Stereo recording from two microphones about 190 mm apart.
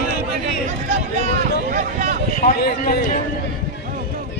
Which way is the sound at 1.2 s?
40° right (ahead or behind).